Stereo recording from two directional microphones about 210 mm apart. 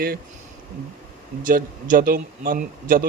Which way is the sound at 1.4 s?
40° right (ahead or behind).